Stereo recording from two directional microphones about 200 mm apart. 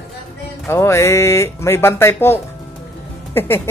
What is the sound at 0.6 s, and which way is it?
Speech, 15° left (ahead or behind).